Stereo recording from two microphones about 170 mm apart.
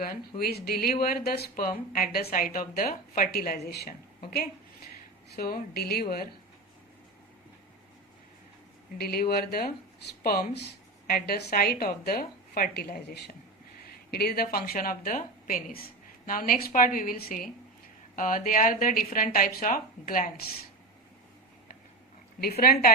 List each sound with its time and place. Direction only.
0.0 s a woman's voice: 60° left (ahead or behind)
3.7 s speech: 70° left (ahead or behind)
4.2 s a woman's voice: 60° left (ahead or behind)
9.0 s speech: 65° left (ahead or behind)
22.4 s speech: 65° left (ahead or behind)